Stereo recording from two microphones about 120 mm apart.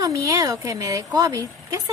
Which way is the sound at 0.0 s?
30° right (ahead or behind).